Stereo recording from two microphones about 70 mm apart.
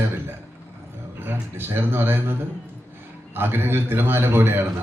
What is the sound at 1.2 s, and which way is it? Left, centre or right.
A man's voice, right.